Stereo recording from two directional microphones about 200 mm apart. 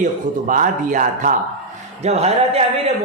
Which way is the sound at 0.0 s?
40° right (ahead or behind).